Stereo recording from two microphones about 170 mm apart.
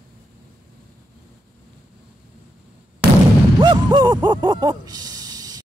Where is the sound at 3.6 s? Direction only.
25° right (ahead or behind).